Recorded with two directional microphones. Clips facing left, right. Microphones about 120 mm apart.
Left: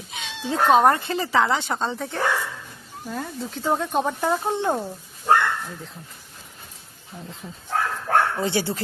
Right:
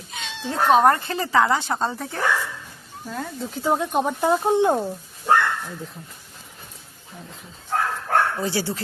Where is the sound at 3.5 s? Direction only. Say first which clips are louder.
Right 1 dB; 10° right (ahead or behind).